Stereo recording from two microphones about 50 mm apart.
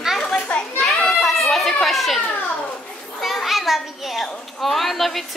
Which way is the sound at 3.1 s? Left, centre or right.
Centre.